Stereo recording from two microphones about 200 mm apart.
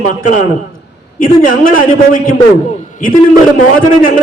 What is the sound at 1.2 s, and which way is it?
A man's voice, 40° left (ahead or behind).